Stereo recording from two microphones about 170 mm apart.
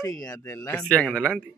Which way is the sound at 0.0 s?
20° left (ahead or behind).